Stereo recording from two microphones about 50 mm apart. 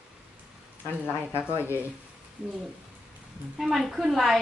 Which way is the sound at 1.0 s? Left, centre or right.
Right.